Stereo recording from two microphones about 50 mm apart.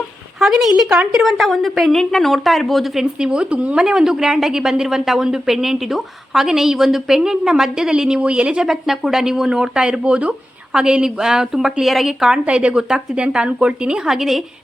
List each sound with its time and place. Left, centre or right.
0.3 s a woman's voice: centre; by 3.8 s right
3.8 s a woman's voice: centre
8.6 s a woman's voice: centre
12.5 s a woman's voice: right
14.1 s a woman's voice: centre